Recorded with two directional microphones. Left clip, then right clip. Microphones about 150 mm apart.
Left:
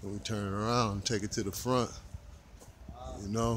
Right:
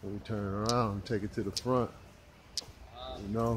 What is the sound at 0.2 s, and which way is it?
Speech, 25° left (ahead or behind).